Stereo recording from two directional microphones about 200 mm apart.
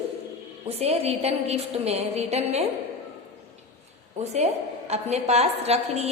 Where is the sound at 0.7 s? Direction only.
30° right (ahead or behind).